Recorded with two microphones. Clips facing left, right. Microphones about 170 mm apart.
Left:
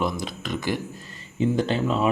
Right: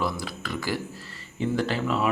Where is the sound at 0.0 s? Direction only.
20° left (ahead or behind).